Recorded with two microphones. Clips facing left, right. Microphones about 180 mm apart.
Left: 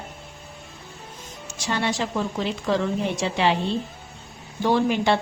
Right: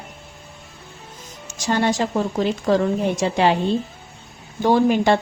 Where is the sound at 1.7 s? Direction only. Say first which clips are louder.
Right 5 dB; 45° right (ahead or behind).